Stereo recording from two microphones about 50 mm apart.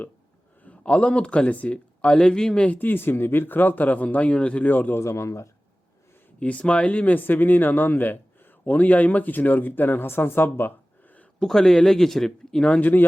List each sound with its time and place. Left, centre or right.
0.6 s speech: left
2.6 s speech: left
4.6 s speech: left
4.9 s speech: left
6.4 s speech: left
11.3 s speech: centre
12.7 s speech: left